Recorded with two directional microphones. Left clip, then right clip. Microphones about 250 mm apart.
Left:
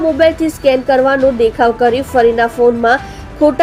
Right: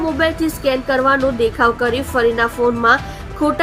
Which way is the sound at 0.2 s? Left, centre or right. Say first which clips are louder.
Left 6 dB; centre.